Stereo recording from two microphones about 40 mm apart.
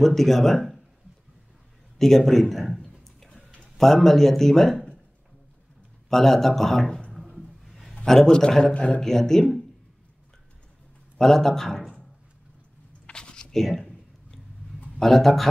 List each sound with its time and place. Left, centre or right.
0.0 s a man's voice: centre
2.0 s a man's voice: centre
2.8 s a sound: centre
3.7 s a man's voice: centre
6.0 s a man's voice: centre
7.2 s a sound: centre
7.9 s a man's voice: centre
8.7 s a man's voice: left
9.0 s a man's voice: centre
11.1 s a man's voice: centre
13.0 s a sound: left
13.5 s a sound: centre
15.0 s a man's voice: centre